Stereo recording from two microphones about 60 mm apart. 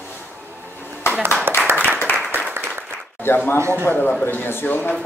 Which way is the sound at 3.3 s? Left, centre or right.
Left.